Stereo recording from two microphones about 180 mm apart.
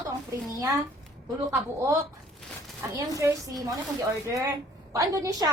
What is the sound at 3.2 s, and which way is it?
A woman's voice, 20° right (ahead or behind).